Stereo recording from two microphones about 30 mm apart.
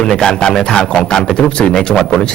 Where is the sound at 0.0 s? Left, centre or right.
Left.